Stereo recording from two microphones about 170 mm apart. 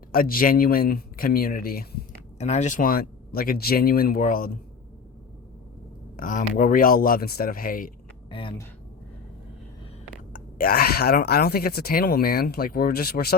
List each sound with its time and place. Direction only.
0.1 s speech: 55° left (ahead or behind)
2.4 s speech: 40° left (ahead or behind)
6.1 s speech: 55° left (ahead or behind)
8.3 s speech: 30° left (ahead or behind)
10.3 s speech: 60° left (ahead or behind)